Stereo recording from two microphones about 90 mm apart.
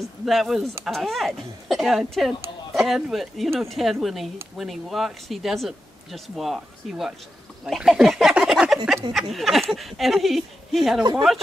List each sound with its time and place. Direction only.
0.2 s speech: centre (ahead or behind)